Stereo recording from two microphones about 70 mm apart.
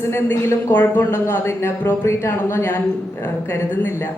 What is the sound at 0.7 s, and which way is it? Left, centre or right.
A woman's voice, left.